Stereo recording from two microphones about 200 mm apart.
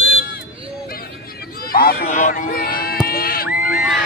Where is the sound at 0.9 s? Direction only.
50° left (ahead or behind).